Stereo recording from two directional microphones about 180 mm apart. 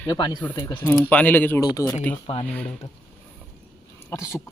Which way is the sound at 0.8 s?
10° left (ahead or behind).